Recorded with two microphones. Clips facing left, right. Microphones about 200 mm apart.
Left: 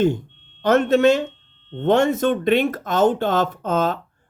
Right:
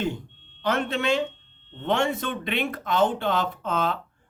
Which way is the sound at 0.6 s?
45° left (ahead or behind).